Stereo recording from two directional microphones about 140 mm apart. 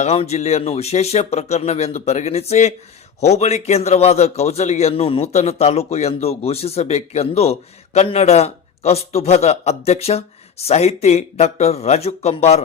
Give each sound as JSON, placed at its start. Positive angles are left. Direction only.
{"t": 0.0, "sound": "a man's voice", "side_deg": 50}